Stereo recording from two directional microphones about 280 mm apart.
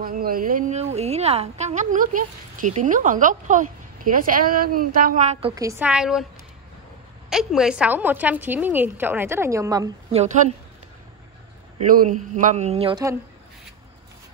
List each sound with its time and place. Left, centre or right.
0.0 s a woman's voice: right
5.5 s a woman's voice: centre
7.2 s a woman's voice: centre
12.1 s a woman's voice: right